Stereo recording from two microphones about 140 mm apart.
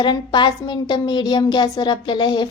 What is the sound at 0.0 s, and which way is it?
A woman's voice, 35° left (ahead or behind).